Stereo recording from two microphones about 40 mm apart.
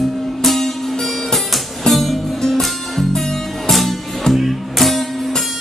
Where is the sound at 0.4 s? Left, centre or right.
Centre.